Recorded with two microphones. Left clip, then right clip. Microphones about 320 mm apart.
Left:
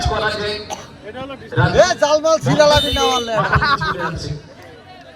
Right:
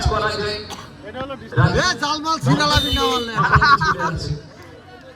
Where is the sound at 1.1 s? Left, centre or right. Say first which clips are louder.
Right 1 dB; right.